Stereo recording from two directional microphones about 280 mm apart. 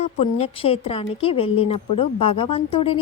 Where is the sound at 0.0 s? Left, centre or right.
Left.